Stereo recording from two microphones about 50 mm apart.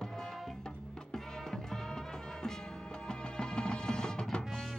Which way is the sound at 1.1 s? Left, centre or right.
Centre.